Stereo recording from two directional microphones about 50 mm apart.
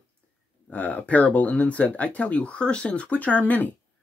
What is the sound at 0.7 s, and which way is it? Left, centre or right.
Speech, left.